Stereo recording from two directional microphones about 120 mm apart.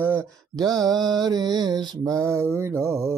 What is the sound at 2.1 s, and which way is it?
Mantra, 25° right (ahead or behind).